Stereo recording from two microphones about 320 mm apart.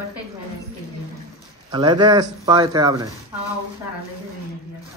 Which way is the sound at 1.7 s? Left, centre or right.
Centre.